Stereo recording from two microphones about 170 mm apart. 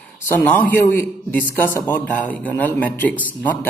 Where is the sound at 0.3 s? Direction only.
10° left (ahead or behind).